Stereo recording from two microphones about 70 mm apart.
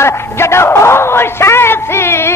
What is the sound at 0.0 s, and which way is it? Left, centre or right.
A man's voice, left.